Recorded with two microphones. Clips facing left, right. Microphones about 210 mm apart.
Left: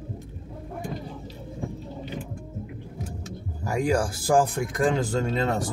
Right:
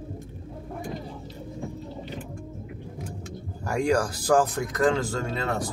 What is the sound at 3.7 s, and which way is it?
Speech, 5° left (ahead or behind).